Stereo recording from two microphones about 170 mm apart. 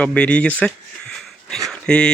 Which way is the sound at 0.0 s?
5° left (ahead or behind).